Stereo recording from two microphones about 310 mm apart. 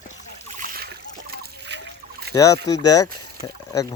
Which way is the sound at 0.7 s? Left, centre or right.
Right.